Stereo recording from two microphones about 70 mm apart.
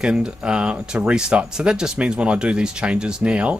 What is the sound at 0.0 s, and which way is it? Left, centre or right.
A man's voice, centre.